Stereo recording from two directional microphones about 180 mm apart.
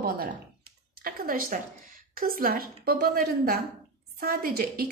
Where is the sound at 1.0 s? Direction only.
50° right (ahead or behind).